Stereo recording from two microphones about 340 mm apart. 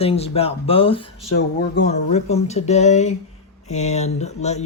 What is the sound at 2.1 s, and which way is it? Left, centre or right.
Speech, centre.